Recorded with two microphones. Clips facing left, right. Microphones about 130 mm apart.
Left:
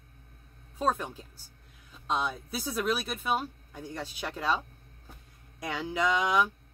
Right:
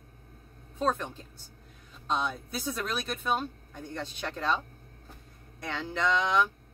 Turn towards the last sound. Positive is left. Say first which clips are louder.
# even
turn(degrees=10)  # may be behind; listen again after turning